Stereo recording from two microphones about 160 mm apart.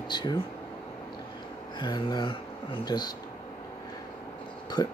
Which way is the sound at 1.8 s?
30° left (ahead or behind).